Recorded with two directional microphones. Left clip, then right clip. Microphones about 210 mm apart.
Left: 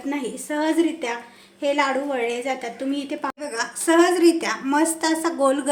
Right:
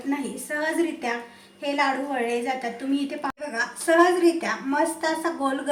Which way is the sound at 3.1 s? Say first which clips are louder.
Left 2 dB; 40° left (ahead or behind).